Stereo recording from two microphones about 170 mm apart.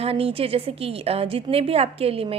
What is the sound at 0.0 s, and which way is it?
A woman's voice, 35° right (ahead or behind).